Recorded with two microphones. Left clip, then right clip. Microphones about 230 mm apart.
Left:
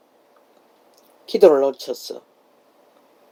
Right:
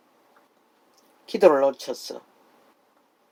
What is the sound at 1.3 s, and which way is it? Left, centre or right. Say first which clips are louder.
Speech: left 4 dB; right.